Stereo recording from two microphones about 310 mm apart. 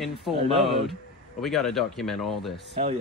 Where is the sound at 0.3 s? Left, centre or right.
Centre.